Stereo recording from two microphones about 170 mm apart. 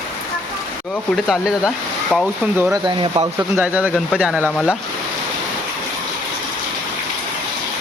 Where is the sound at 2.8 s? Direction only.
30° right (ahead or behind).